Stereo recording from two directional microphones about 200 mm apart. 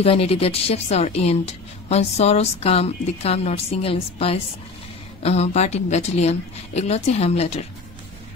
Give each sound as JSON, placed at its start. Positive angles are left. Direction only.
{"t": 0.0, "sound": "a woman's voice", "side_deg": 30}